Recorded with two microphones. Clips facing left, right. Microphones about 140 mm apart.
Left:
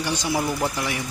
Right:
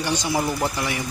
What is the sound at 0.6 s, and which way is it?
Speech, centre (ahead or behind).